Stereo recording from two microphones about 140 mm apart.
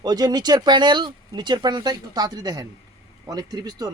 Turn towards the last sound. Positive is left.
turn(degrees=-30)  # may be behind; listen again after turning